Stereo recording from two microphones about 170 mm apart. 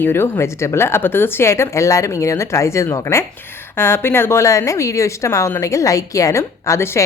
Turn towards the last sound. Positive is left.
turn(degrees=15)  # may be behind; listen again after turning